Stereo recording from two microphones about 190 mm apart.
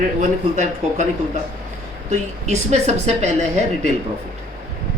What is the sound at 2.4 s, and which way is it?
Speech, 35° right (ahead or behind).